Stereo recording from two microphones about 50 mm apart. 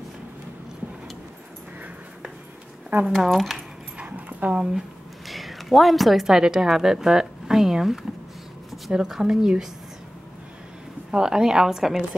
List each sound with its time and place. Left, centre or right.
2.9 s speech: right
3.3 s speech: centre
4.0 s dog: right
5.3 s a woman's voice: centre
11.1 s a woman's voice: centre